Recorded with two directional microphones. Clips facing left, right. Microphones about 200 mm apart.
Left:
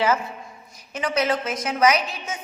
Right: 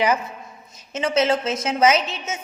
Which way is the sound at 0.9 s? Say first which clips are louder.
Right 3 dB; 25° right (ahead or behind).